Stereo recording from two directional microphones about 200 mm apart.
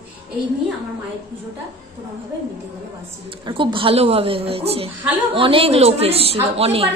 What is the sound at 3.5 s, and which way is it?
A woman's voice, 25° right (ahead or behind).